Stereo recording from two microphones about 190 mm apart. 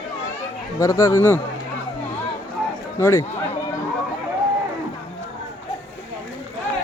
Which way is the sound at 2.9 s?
15° left (ahead or behind).